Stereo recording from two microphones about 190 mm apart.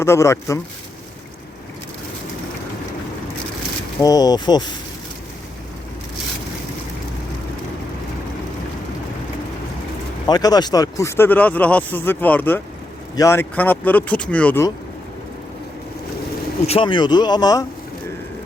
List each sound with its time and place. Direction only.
0.0 s speech: 15° left (ahead or behind)
4.0 s speech: 20° left (ahead or behind)
10.2 s speech: 20° left (ahead or behind)
16.6 s speech: 30° left (ahead or behind)